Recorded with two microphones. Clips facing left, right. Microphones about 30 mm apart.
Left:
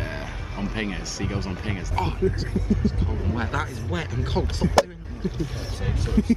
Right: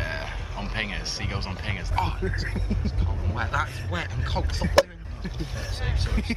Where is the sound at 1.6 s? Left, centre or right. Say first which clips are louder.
Left 1 dB; centre.